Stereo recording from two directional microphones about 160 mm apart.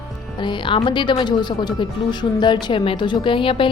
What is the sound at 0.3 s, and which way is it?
A woman's voice, 30° left (ahead or behind).